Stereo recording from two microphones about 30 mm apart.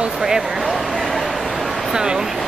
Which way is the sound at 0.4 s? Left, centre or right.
Centre.